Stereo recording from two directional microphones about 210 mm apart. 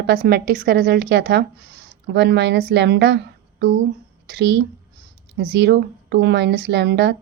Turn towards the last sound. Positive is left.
turn(degrees=-55)  # may be behind; listen again after turning